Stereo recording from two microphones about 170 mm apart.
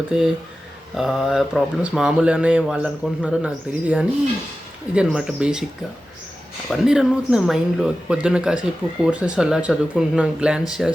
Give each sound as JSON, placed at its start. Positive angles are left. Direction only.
{"t": 0.9, "sound": "speech", "side_deg": 0}
{"t": 6.7, "sound": "speech", "side_deg": -5}